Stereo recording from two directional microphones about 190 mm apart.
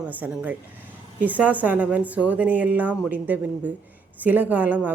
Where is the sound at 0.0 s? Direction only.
10° right (ahead or behind).